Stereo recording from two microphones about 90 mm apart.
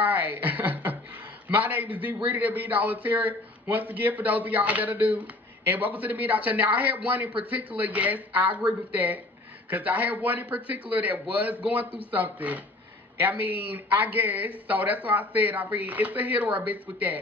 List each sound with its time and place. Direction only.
0.0 s a man's voice: 20° right (ahead or behind)